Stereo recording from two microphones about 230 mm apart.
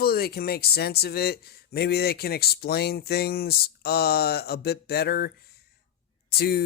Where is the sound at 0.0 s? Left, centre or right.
Left.